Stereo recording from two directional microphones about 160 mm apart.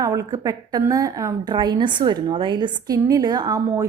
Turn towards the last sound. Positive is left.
turn(degrees=-20)  # may be behind; listen again after turning